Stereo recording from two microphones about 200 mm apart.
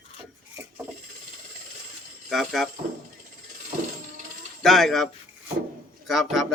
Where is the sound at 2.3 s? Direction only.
Centre (ahead or behind).